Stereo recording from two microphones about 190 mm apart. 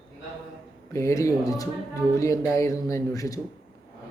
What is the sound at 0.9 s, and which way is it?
Speech, 15° left (ahead or behind).